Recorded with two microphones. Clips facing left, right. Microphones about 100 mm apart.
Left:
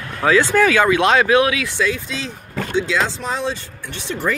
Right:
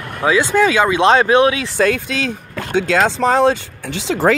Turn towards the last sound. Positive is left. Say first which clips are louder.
# right 7 dB
turn(degrees=-90)